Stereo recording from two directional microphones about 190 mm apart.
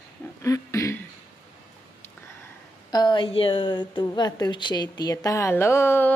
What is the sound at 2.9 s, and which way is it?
A woman's voice, 25° left (ahead or behind).